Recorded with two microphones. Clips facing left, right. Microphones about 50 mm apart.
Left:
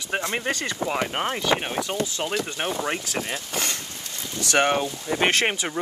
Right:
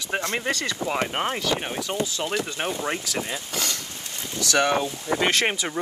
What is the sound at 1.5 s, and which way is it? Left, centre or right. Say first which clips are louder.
Speech: left 3 dB; left.